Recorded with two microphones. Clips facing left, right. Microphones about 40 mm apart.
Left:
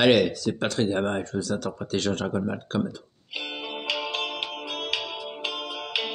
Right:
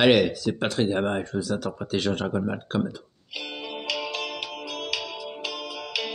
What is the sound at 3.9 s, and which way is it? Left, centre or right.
Music, left.